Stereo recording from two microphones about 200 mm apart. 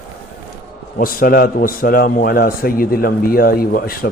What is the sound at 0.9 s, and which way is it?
A man's voice, 45° left (ahead or behind).